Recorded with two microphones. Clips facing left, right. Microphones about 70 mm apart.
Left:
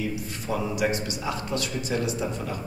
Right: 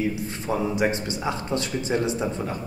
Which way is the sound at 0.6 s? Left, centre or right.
Right.